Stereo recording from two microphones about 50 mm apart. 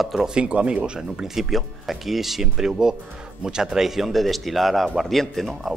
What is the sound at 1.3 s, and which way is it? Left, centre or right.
Speech, centre.